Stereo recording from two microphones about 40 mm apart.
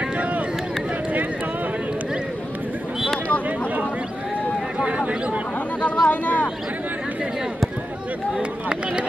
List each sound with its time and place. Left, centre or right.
4.7 s a sound: right
5.8 s speech: left
8.4 s speech: right